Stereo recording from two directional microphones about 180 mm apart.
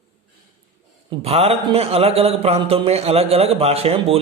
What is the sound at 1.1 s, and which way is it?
A man's voice, 35° right (ahead or behind).